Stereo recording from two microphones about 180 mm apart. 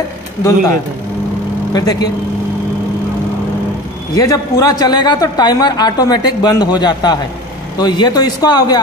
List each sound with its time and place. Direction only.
1.7 s a man's voice: 20° left (ahead or behind)
4.1 s a man's voice: 20° left (ahead or behind)